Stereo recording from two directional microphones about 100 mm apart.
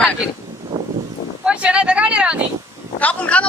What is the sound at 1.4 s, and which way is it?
Speech, 10° right (ahead or behind).